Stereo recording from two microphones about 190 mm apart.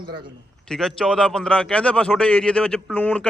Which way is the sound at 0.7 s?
Centre (ahead or behind).